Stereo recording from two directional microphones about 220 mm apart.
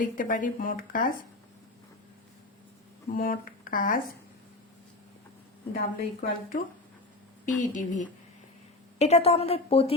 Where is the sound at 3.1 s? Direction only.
40° left (ahead or behind).